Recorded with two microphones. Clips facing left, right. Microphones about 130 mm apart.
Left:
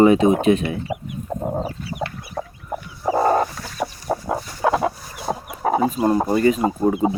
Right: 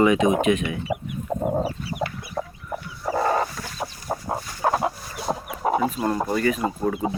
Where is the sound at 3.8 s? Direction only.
90° left.